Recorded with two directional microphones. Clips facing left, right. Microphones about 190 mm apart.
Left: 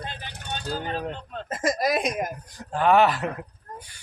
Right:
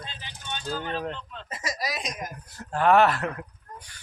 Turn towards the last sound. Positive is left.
turn(degrees=10)  # may be behind; listen again after turning